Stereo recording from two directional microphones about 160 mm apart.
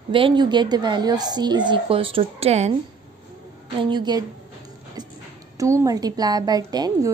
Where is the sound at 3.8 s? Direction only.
30° right (ahead or behind).